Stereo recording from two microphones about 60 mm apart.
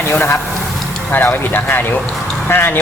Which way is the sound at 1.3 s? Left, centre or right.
Left.